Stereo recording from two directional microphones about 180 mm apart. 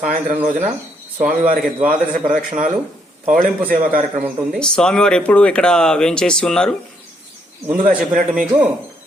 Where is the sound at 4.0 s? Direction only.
Centre (ahead or behind).